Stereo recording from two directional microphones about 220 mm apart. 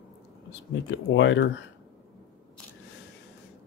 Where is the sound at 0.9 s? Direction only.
55° left (ahead or behind).